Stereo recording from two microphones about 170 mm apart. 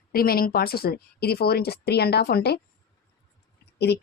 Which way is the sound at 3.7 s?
75° left (ahead or behind).